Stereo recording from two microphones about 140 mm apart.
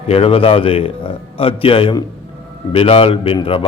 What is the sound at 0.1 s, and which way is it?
A man's voice, 45° left (ahead or behind).